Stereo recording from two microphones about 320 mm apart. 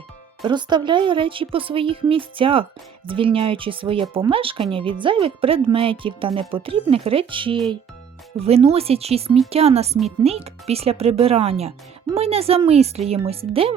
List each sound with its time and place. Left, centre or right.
0.4 s speech: centre